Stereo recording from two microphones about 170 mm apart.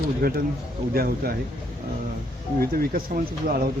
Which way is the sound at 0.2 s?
65° right (ahead or behind).